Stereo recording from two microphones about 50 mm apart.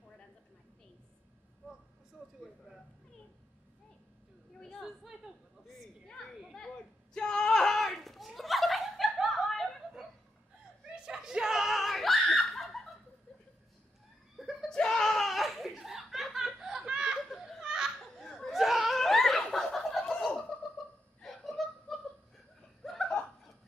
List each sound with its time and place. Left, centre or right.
4.6 s a sound: centre
6.0 s children playing: centre
7.2 s a sound: centre
8.4 s snicker: centre
11.0 s snicker: centre
14.3 s laughter: centre
14.7 s chuckle: centre
17.6 s laughter: centre
18.1 s laughter: centre
22.8 s chuckle: centre